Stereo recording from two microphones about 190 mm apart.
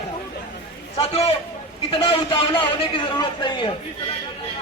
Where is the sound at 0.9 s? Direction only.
30° left (ahead or behind).